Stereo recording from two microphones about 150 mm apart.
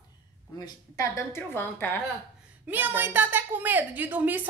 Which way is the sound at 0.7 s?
20° left (ahead or behind).